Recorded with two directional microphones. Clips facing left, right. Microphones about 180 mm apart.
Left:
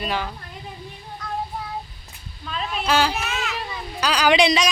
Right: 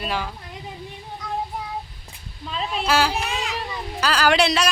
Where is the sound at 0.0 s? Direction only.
Centre (ahead or behind).